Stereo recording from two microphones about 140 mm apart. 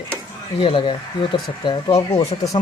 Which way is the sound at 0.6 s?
40° left (ahead or behind).